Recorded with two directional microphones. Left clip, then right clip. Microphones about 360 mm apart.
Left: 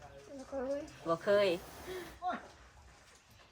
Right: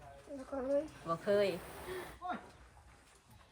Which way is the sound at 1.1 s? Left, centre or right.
Left.